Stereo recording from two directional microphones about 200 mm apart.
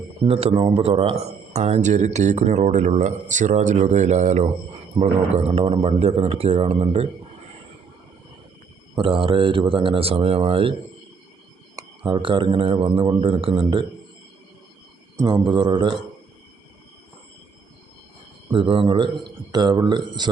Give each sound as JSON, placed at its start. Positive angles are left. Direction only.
{"t": 0.3, "sound": "speech", "side_deg": -30}
{"t": 9.0, "sound": "speech", "side_deg": -25}
{"t": 11.8, "sound": "speech", "side_deg": -25}
{"t": 15.2, "sound": "speech", "side_deg": -20}
{"t": 18.5, "sound": "speech", "side_deg": -25}